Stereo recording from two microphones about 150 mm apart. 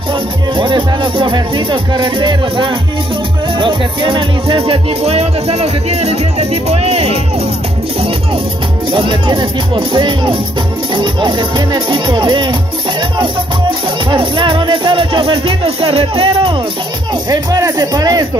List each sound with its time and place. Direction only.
0.6 s music: 35° right (ahead or behind)
8.9 s music: 35° right (ahead or behind)
17.3 s speech: 25° right (ahead or behind)